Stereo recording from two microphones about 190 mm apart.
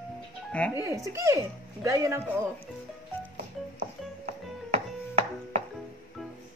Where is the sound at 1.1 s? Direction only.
15° right (ahead or behind).